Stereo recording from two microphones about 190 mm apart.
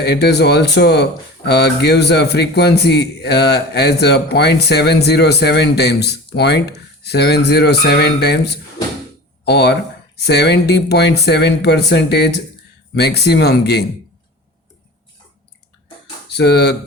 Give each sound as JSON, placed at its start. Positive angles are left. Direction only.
{"t": 0.0, "sound": "a man's voice", "side_deg": 60}
{"t": 16.3, "sound": "speech", "side_deg": 60}